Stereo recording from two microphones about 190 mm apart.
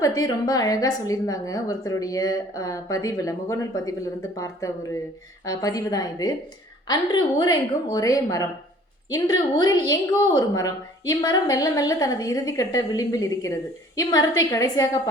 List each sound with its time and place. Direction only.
0.0 s a woman's voice: 20° left (ahead or behind)